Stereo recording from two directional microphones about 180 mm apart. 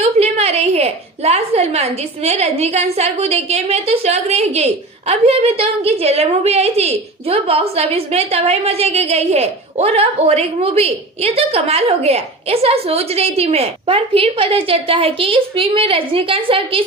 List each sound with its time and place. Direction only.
0.0 s a woman's voice: 35° right (ahead or behind)